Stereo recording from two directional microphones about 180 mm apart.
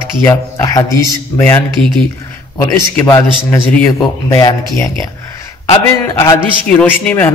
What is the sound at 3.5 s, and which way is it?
Speech, 15° left (ahead or behind).